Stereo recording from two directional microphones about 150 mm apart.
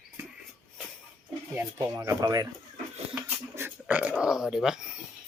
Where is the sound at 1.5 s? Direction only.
15° right (ahead or behind).